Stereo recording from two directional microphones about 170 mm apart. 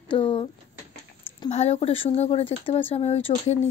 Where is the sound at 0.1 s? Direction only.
30° left (ahead or behind).